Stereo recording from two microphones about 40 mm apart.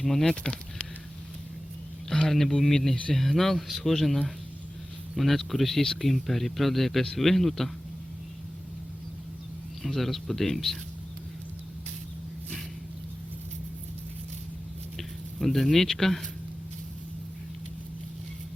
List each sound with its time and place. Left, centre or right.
0.0 s speech: centre
0.3 s speech: centre
2.0 s speech: centre
9.8 s speech: centre
14.9 s speech: centre